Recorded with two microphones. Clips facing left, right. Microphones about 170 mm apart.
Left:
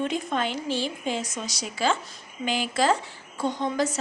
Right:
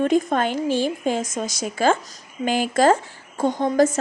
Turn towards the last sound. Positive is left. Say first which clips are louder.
# right 7 dB
turn(degrees=-45)  # may be behind; listen again after turning